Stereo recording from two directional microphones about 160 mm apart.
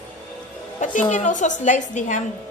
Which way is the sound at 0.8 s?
50° left (ahead or behind).